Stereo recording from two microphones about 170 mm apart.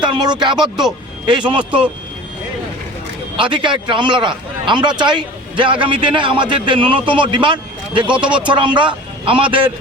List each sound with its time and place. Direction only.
0.0 s a man's voice: 25° right (ahead or behind)
3.3 s a man's voice: 30° right (ahead or behind)
8.2 s speech: 5° right (ahead or behind)
8.4 s a man's voice: 30° right (ahead or behind)